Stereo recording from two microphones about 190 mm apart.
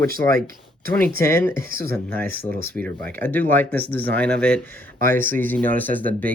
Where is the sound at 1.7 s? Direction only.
50° right (ahead or behind).